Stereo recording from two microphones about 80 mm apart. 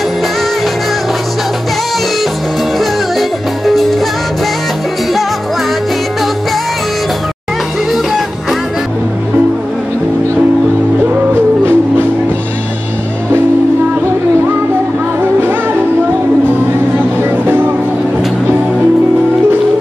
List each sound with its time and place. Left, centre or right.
2.8 s music: centre
7.9 s music: centre
11.1 s music: right
17.2 s music: right